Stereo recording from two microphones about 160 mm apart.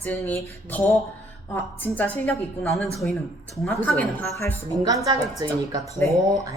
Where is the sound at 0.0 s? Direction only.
15° left (ahead or behind).